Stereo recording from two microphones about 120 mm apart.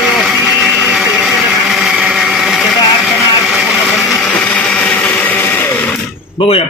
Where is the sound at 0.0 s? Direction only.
5° right (ahead or behind); by 5.9 s 15° left (ahead or behind).